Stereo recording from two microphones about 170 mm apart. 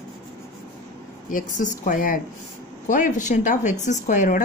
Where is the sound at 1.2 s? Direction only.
50° left (ahead or behind).